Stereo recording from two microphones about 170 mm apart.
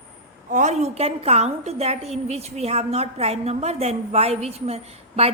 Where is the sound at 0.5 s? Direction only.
45° right (ahead or behind).